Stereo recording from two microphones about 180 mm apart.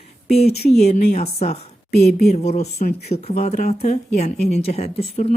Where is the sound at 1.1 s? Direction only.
35° left (ahead or behind).